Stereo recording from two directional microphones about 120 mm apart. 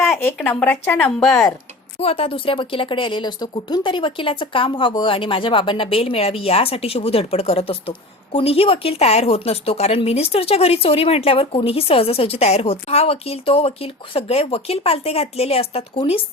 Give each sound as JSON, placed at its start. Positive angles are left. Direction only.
{"t": 0.4, "sound": "speech", "side_deg": 15}
{"t": 1.3, "sound": "speech", "side_deg": 25}
{"t": 2.0, "sound": "speech", "side_deg": 55}